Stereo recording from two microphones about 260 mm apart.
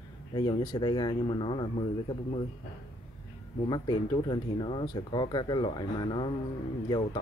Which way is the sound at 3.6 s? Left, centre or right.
Centre.